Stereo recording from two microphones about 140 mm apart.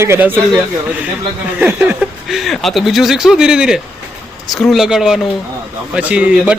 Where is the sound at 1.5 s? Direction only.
15° right (ahead or behind).